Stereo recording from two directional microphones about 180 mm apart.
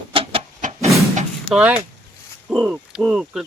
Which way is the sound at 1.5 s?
5° right (ahead or behind).